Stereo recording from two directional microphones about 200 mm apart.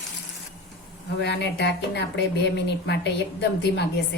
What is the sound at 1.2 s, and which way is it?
Speech, 60° left (ahead or behind).